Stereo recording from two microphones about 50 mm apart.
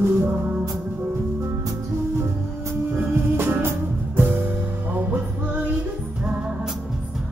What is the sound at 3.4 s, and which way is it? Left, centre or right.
Music, right.